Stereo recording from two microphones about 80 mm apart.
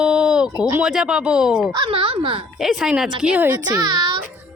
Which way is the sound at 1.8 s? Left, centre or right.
Right.